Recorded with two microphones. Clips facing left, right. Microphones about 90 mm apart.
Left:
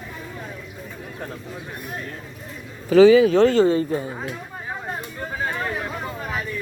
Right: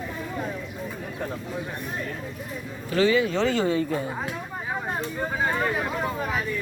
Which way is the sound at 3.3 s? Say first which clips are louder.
Left 7 dB; 45° left (ahead or behind).